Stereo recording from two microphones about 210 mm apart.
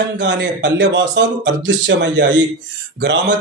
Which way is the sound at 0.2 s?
55° right (ahead or behind).